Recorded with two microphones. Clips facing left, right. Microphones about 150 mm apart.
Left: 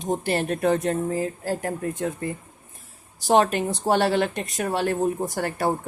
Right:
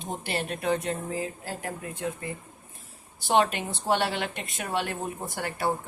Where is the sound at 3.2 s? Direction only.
40° left (ahead or behind).